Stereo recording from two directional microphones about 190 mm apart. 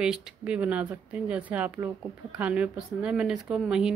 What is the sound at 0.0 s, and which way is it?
Speech, 5° right (ahead or behind).